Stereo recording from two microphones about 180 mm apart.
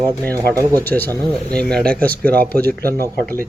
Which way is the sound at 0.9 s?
Centre (ahead or behind).